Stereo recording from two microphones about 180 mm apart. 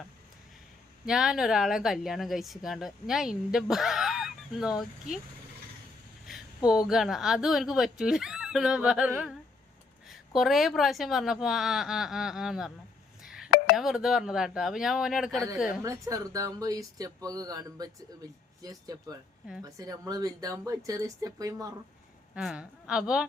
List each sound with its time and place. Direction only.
1.0 s speech: 5° right (ahead or behind)
6.7 s speech: 5° right (ahead or behind)
13.2 s a sound: 5° right (ahead or behind)
13.7 s speech: centre (ahead or behind)
15.8 s speech: 20° right (ahead or behind)
22.4 s speech: 5° right (ahead or behind)